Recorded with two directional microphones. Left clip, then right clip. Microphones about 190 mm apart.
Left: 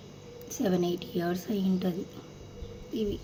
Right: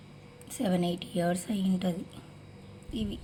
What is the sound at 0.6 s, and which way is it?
Speech, 55° right (ahead or behind).